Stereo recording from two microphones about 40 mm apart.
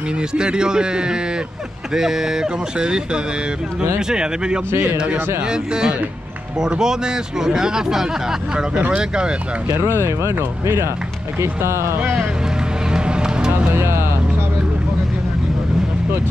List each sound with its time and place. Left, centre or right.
0.3 s speech: right
9.8 s speech: right
12.9 s music: right
13.7 s vehicle: right